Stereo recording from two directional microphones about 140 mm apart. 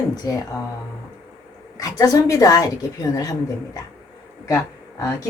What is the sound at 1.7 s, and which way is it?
Speech, 25° left (ahead or behind).